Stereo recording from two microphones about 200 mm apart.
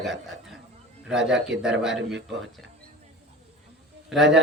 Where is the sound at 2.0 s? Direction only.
60° right (ahead or behind).